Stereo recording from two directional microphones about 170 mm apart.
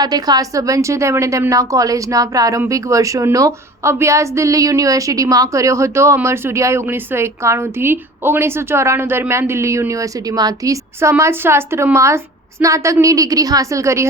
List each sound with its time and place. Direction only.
0.0 s a woman's voice: 20° right (ahead or behind)